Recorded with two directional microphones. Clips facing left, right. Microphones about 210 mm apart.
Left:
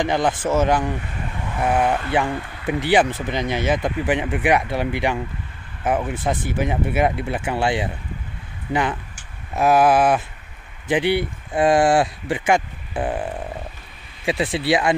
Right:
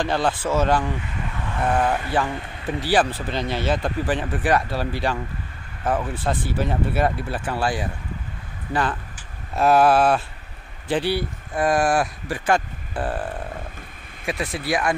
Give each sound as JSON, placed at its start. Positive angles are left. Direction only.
{"t": 0.0, "sound": "speech", "side_deg": 15}
{"t": 12.4, "sound": "speech", "side_deg": 15}
{"t": 14.2, "sound": "speech", "side_deg": 30}